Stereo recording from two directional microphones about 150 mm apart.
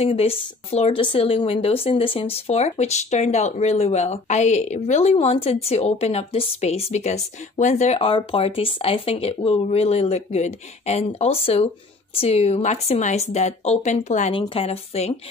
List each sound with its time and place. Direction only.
0.0 s speech: 40° left (ahead or behind)
14.3 s a woman's voice: 35° left (ahead or behind)